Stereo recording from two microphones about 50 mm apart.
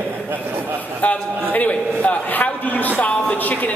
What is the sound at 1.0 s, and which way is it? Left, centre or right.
A man's voice, left.